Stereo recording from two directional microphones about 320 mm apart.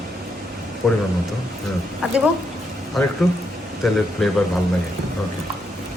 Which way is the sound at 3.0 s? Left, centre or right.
Centre.